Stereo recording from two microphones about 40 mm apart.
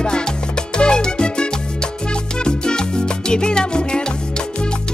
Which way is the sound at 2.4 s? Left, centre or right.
Left.